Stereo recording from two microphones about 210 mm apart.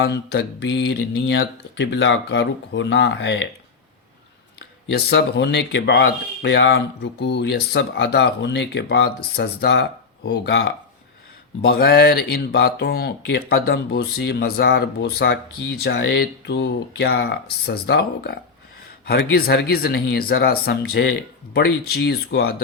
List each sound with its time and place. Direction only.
0.0 s speech: 50° left (ahead or behind)
4.9 s speech: 50° left (ahead or behind)
11.7 s speech: 50° left (ahead or behind)